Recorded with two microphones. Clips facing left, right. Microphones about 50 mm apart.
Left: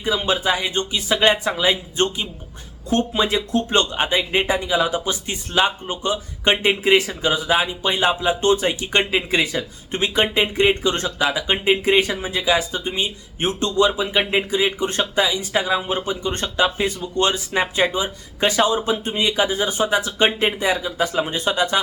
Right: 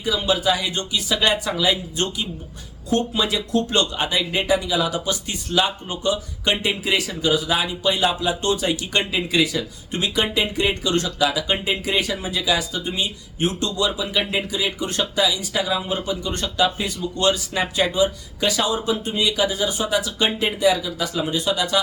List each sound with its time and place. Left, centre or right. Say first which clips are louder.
0.0 s speech: even; left